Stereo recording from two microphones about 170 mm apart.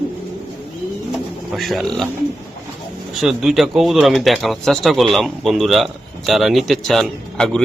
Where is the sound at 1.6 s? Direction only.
Centre (ahead or behind).